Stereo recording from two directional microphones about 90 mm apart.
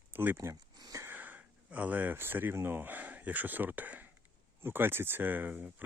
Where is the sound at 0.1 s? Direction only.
20° right (ahead or behind).